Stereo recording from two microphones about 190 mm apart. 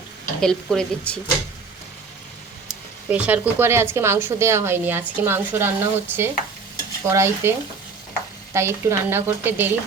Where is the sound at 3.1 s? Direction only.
10° right (ahead or behind).